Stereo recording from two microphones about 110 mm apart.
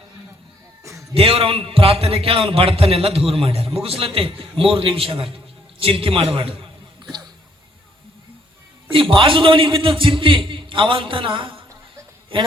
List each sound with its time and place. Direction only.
1.1 s a man's voice: 60° right (ahead or behind); by 7.3 s 45° right (ahead or behind)
8.9 s a man's voice: 50° right (ahead or behind)